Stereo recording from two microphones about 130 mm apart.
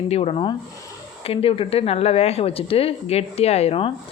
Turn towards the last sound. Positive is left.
turn(degrees=50)  # may be behind; listen again after turning